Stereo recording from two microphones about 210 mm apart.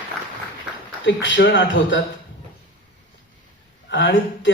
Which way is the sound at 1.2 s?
60° left (ahead or behind).